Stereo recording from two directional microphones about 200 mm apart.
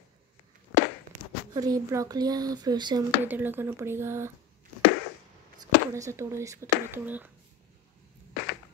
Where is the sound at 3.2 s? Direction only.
10° right (ahead or behind).